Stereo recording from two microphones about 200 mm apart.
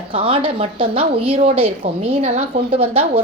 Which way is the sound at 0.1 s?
25° right (ahead or behind).